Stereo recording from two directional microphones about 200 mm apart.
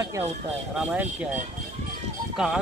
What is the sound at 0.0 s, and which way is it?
Speech, 15° right (ahead or behind).